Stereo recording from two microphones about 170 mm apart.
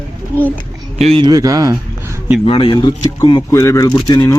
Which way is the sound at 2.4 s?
30° left (ahead or behind).